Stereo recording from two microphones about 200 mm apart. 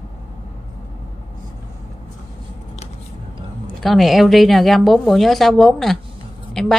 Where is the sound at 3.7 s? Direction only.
Centre (ahead or behind).